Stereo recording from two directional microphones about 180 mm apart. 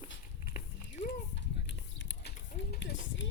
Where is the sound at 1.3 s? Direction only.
75° left (ahead or behind).